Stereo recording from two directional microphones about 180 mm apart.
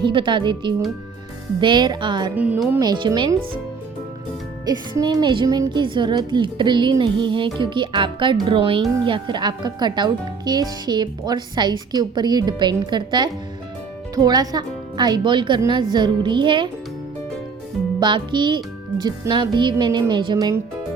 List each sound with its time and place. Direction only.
0.0 s speech: 25° right (ahead or behind)
2.3 s speech: 10° right (ahead or behind)
2.8 s speech: 25° right (ahead or behind)
4.6 s speech: 25° right (ahead or behind)
18.0 s speech: 25° right (ahead or behind)